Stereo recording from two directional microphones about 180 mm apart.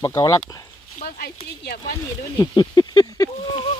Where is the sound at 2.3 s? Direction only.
25° left (ahead or behind).